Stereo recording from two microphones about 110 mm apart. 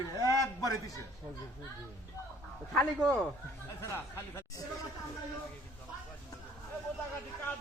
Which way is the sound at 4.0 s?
25° left (ahead or behind).